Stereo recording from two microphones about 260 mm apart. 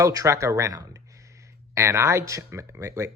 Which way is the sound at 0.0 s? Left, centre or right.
Centre.